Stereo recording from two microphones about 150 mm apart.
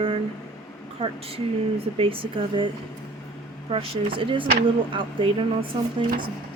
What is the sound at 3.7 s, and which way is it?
Speech, 35° right (ahead or behind).